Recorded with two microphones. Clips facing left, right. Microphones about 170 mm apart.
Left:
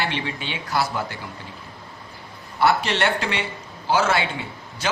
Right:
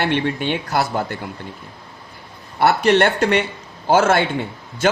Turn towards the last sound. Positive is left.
turn(degrees=-50)  # may be behind; listen again after turning